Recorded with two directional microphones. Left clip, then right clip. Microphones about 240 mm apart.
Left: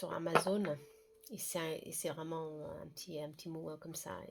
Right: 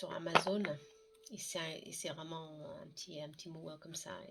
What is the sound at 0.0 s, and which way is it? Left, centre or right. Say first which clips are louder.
Speech: left 2 dB; left.